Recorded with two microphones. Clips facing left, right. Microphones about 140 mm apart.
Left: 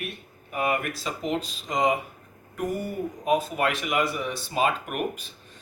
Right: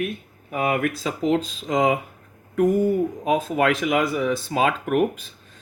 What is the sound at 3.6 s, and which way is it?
Speech, 90° right.